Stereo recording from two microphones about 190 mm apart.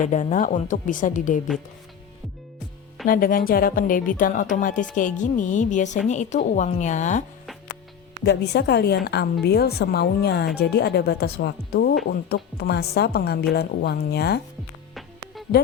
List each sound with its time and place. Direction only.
0.0 s speech: 40° left (ahead or behind)
3.1 s a woman's voice: 45° left (ahead or behind)
8.2 s a woman's voice: 65° left (ahead or behind)